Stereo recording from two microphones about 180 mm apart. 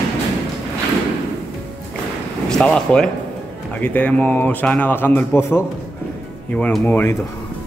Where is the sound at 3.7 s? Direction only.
10° left (ahead or behind).